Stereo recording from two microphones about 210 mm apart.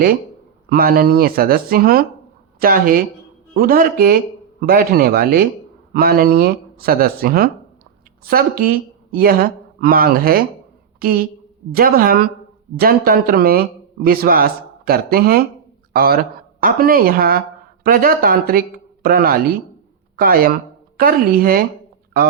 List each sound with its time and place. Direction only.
0.7 s a woman's voice: 45° right (ahead or behind)